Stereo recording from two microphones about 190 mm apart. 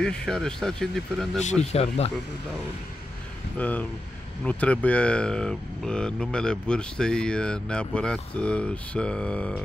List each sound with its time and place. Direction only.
0.0 s speech: 5° left (ahead or behind)
1.7 s speech: 35° left (ahead or behind)
3.5 s speech: 10° left (ahead or behind)